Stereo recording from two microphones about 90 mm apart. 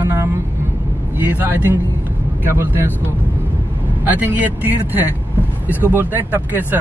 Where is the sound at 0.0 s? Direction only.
30° right (ahead or behind).